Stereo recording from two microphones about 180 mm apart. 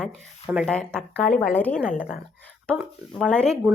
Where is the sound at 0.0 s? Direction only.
Centre (ahead or behind).